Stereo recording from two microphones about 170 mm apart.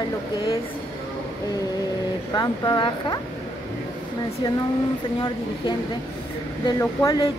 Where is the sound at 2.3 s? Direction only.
25° left (ahead or behind).